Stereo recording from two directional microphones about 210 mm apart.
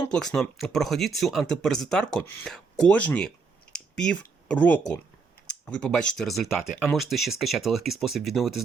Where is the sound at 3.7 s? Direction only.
5° left (ahead or behind).